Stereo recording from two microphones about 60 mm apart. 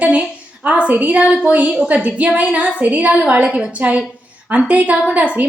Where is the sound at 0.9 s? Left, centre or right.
Right.